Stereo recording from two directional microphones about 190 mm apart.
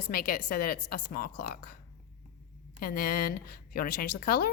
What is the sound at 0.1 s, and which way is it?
A woman's voice, 50° left (ahead or behind).